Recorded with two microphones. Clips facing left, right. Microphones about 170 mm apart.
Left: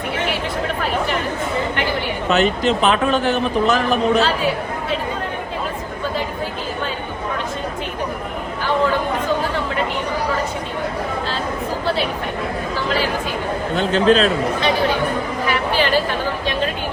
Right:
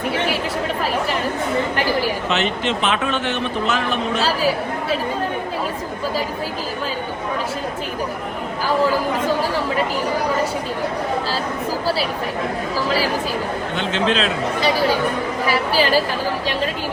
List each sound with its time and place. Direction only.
2.3 s a man's voice: 40° left (ahead or behind)
13.7 s a man's voice: 40° left (ahead or behind)
15.5 s a woman's voice: 35° right (ahead or behind)